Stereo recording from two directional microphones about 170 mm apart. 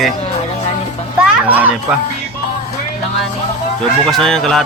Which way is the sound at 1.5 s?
10° right (ahead or behind).